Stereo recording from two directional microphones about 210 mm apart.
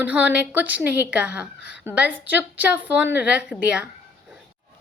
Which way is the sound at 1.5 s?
55° left (ahead or behind).